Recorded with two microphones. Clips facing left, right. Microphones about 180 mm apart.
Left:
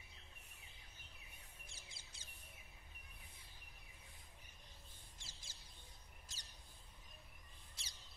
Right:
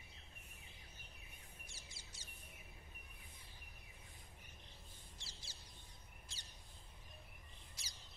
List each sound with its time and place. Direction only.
1.7 s bird vocalization: 55° left (ahead or behind)
5.2 s bird: 50° left (ahead or behind)
7.8 s bird: 30° left (ahead or behind)